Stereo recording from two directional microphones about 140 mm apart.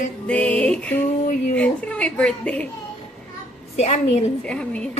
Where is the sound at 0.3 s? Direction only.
10° left (ahead or behind).